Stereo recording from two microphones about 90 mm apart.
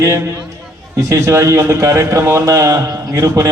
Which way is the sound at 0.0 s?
35° right (ahead or behind).